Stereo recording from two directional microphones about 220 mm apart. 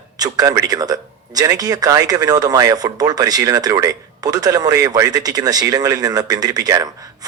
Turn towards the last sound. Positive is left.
turn(degrees=-15)  # may be behind; listen again after turning